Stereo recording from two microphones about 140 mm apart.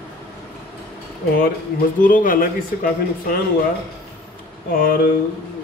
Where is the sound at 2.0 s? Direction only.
75° left (ahead or behind).